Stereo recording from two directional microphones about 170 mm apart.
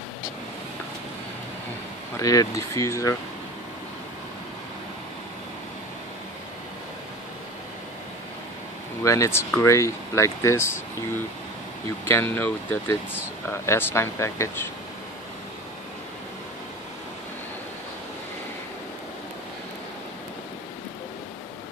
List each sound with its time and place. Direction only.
2.1 s speech: 20° left (ahead or behind)
9.0 s speech: 15° left (ahead or behind)
12.0 s speech: 15° left (ahead or behind)